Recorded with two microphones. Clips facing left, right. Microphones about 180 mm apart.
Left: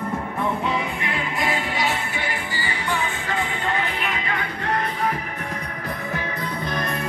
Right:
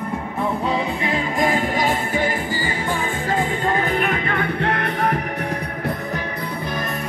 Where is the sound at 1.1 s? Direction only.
45° right (ahead or behind).